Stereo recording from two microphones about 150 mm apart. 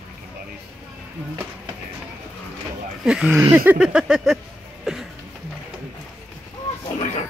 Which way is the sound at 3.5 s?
10° right (ahead or behind).